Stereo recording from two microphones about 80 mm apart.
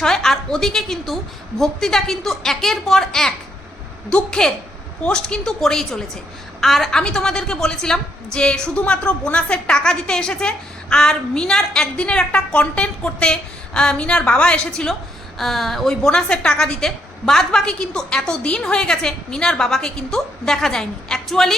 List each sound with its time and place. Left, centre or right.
0.0 s a woman's voice: centre